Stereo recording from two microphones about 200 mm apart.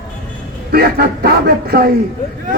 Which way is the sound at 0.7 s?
50° right (ahead or behind).